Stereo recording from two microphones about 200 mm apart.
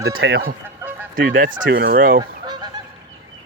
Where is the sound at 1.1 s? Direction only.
45° right (ahead or behind).